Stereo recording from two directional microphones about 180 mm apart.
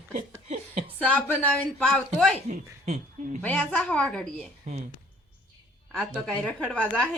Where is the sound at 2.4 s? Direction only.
40° right (ahead or behind).